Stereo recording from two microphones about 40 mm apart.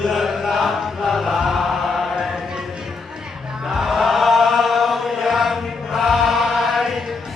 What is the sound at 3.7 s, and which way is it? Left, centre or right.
Chant, centre.